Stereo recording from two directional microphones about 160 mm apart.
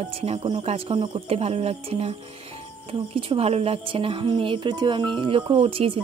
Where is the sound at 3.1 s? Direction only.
35° right (ahead or behind).